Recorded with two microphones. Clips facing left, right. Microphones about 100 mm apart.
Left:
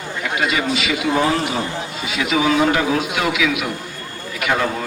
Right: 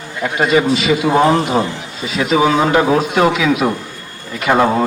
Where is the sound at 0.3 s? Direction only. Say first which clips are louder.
Right 7 dB; 35° right (ahead or behind).